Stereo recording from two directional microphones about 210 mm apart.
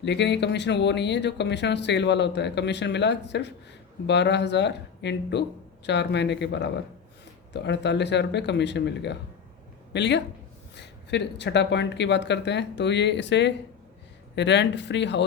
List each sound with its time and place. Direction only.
0.0 s speech: 55° left (ahead or behind)